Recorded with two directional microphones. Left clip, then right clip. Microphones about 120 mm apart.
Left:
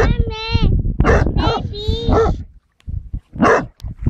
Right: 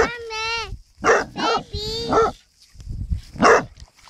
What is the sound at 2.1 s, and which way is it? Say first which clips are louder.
Dog: left 2 dB; 40° right (ahead or behind).